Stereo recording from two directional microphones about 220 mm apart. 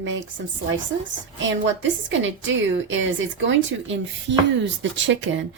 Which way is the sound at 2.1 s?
60° right (ahead or behind).